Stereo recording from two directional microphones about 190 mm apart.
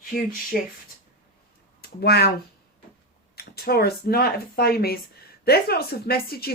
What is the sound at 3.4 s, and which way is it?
A woman's voice, 55° left (ahead or behind).